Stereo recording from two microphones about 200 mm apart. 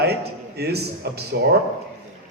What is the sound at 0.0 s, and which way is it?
A man's voice, 55° right (ahead or behind).